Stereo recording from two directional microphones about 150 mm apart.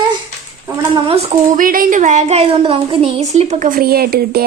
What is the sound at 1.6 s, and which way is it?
Speech, 70° right (ahead or behind).